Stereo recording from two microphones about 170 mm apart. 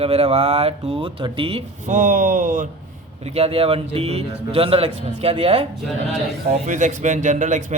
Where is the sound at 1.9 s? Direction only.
50° right (ahead or behind).